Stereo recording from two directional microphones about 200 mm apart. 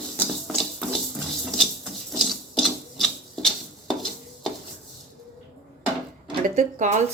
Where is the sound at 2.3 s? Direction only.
Centre (ahead or behind).